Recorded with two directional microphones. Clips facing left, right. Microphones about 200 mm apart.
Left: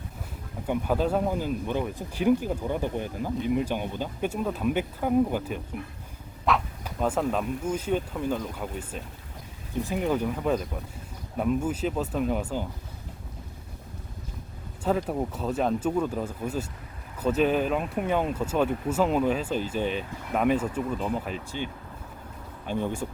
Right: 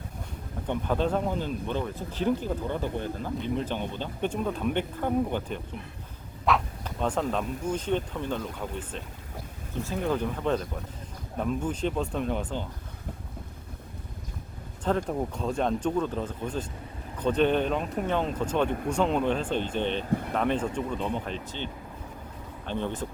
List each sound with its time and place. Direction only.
0.7 s speech: 5° left (ahead or behind)
14.8 s speech: 5° left (ahead or behind)